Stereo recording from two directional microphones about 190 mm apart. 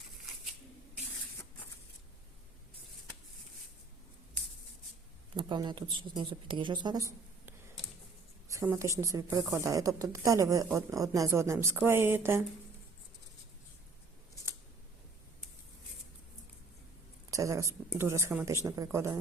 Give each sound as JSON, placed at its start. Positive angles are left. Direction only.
{"t": 5.4, "sound": "speech", "side_deg": -20}
{"t": 8.4, "sound": "a woman's voice", "side_deg": -15}
{"t": 17.3, "sound": "a woman's voice", "side_deg": -15}